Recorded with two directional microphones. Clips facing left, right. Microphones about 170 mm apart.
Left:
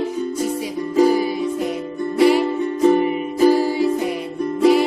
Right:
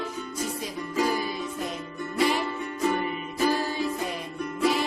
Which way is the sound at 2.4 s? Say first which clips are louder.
Left 11 dB; 30° left (ahead or behind).